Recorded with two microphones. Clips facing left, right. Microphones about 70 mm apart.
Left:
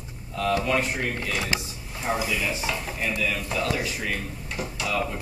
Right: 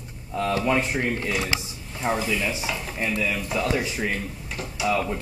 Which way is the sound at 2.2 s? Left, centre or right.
Centre.